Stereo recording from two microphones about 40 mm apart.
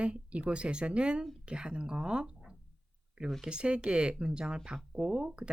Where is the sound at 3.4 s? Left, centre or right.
Right.